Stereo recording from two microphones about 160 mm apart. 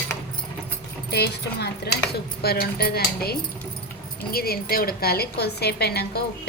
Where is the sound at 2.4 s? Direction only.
80° left.